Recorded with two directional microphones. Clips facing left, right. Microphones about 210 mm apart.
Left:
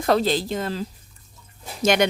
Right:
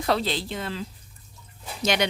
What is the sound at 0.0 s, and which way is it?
Speech, 45° left (ahead or behind).